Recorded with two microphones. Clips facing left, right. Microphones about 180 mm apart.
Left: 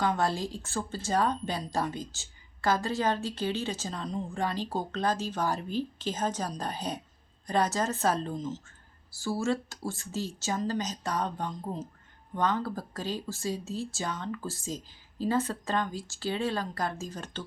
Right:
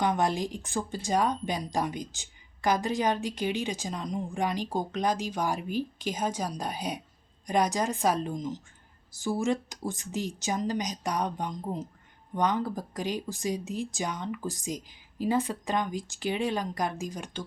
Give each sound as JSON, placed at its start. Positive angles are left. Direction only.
{"t": 0.0, "sound": "speech", "side_deg": -20}